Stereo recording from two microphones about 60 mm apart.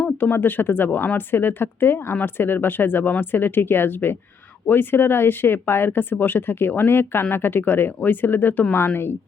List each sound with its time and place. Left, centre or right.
0.2 s speech: left